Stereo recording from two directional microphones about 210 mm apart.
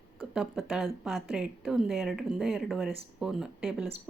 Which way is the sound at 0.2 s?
Centre (ahead or behind).